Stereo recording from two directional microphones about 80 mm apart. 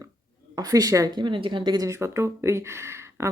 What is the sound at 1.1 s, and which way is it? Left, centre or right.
Speech, right.